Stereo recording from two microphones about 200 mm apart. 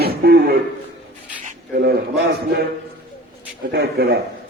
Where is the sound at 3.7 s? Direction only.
55° right (ahead or behind).